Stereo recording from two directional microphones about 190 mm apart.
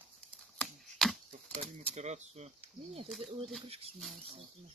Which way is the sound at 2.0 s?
35° right (ahead or behind).